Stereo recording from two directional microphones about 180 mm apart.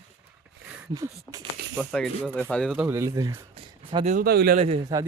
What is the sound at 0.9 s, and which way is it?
Speech, 20° right (ahead or behind).